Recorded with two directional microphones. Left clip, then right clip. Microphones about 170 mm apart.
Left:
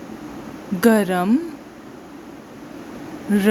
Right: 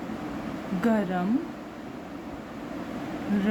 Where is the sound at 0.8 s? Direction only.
75° left (ahead or behind).